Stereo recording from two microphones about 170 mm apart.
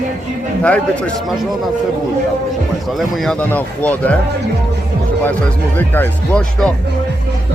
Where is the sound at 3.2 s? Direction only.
5° left (ahead or behind).